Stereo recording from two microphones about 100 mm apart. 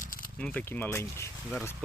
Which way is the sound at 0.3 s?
10° left (ahead or behind).